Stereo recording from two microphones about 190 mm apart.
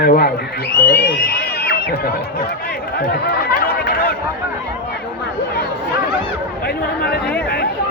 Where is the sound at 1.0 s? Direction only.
60° left (ahead or behind).